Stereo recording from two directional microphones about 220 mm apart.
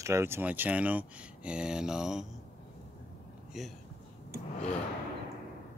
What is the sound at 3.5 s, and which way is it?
Speech, centre (ahead or behind).